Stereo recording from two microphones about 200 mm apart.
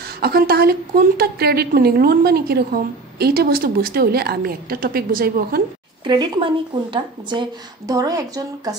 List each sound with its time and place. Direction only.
0.0 s a woman's voice: 50° right (ahead or behind)
6.0 s speech: 20° right (ahead or behind)